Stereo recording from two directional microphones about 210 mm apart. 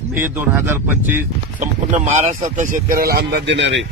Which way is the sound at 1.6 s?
35° right (ahead or behind).